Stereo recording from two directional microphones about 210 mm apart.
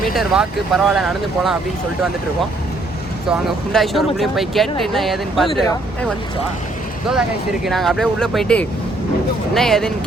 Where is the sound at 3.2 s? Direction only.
Centre (ahead or behind).